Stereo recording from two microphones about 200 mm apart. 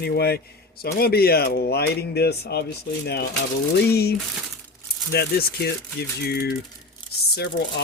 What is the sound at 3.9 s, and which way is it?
Speech, 50° left (ahead or behind).